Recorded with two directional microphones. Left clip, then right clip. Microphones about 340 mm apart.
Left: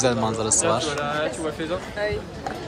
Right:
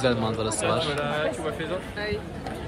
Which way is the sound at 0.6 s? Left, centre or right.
Left.